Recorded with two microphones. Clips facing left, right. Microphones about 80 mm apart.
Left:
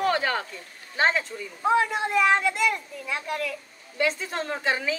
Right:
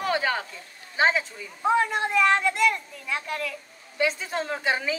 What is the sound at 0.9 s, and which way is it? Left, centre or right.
A woman's voice, centre.